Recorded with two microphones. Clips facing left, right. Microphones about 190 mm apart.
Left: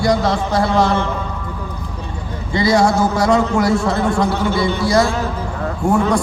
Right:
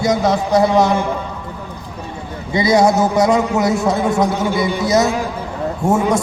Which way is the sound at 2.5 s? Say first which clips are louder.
Right 1 dB; 20° right (ahead or behind).